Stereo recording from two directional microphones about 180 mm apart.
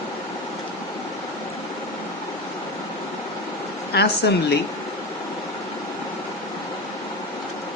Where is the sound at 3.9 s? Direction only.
65° left (ahead or behind).